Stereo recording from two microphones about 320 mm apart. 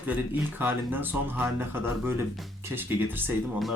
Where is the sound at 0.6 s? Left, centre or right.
Centre.